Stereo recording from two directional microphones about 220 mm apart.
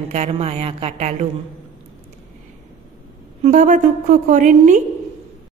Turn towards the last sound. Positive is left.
turn(degrees=-35)  # may be behind; listen again after turning